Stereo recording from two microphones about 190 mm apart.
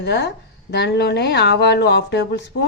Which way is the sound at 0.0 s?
60° left (ahead or behind).